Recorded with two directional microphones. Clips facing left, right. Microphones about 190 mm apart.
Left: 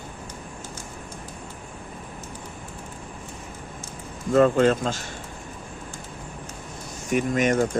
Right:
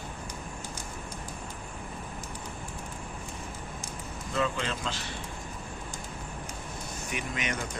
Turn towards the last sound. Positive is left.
turn(degrees=45)  # may be behind; listen again after turning